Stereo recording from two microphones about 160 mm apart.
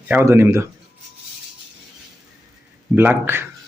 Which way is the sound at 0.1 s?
15° right (ahead or behind).